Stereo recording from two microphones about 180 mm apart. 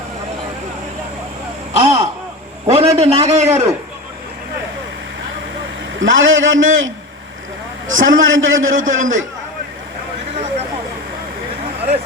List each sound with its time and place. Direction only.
1.7 s a sound: 35° right (ahead or behind)
2.6 s a man's voice: 35° right (ahead or behind)
6.0 s a man's voice: 90° right